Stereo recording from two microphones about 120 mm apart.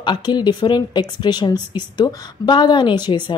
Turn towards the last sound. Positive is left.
turn(degrees=40)  # may be behind; listen again after turning